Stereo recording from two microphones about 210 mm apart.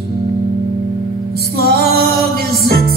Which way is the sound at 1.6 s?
50° right (ahead or behind).